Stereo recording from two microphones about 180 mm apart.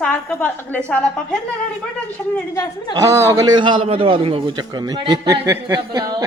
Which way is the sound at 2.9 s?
15° right (ahead or behind).